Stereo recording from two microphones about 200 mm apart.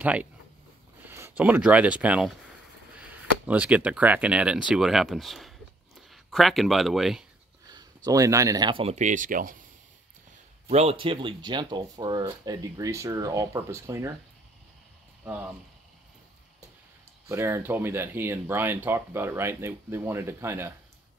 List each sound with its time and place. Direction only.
0.0 s speech: 5° right (ahead or behind)
7.6 s speech: 20° right (ahead or behind); by 9.6 s 45° right (ahead or behind)
10.7 s speech: 30° right (ahead or behind); by 14.1 s 15° right (ahead or behind)
17.3 s speech: 15° right (ahead or behind)